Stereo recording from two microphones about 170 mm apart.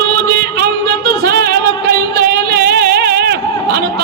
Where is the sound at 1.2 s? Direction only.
70° right (ahead or behind).